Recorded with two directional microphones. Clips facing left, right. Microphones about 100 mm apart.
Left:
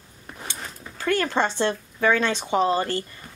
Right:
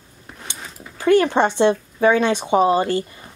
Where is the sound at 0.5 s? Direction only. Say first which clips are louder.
Even; 5° right (ahead or behind).